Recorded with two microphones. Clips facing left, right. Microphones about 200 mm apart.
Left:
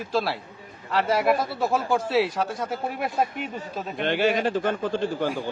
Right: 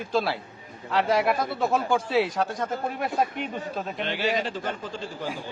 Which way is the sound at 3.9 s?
55° left (ahead or behind).